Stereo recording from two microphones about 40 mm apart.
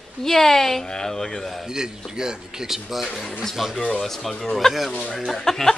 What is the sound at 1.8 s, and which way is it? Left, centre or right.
A man's voice, centre.